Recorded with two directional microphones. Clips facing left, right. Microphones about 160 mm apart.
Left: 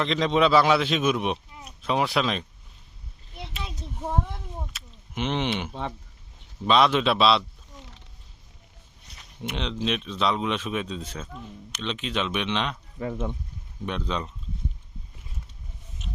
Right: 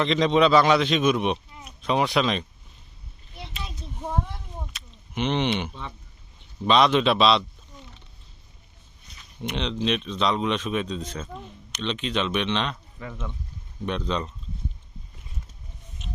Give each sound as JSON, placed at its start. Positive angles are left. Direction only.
{"t": 0.0, "sound": "speech", "side_deg": 0}
{"t": 4.0, "sound": "a sound", "side_deg": 5}
{"t": 6.7, "sound": "speech", "side_deg": 5}
{"t": 9.4, "sound": "speech", "side_deg": 5}
{"t": 13.0, "sound": "speech", "side_deg": 40}
{"t": 13.8, "sound": "speech", "side_deg": 5}